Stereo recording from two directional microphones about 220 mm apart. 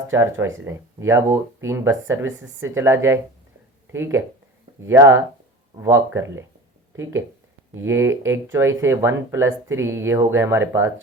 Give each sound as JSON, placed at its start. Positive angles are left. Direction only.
{"t": 0.1, "sound": "speech", "side_deg": -10}